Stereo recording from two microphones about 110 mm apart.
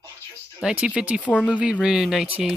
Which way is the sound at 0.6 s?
10° right (ahead or behind).